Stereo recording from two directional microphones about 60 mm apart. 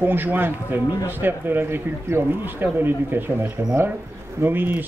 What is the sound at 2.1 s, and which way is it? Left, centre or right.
Speech, right.